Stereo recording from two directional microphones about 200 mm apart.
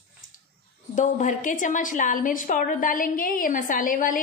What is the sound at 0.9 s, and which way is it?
A woman's voice, 40° left (ahead or behind).